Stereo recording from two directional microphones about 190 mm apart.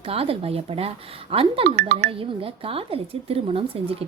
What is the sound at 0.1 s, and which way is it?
Speech, 30° right (ahead or behind).